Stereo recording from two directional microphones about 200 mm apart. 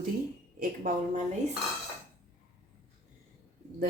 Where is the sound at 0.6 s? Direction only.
40° right (ahead or behind).